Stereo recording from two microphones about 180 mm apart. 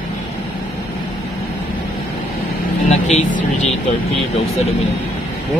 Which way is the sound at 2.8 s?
40° left (ahead or behind).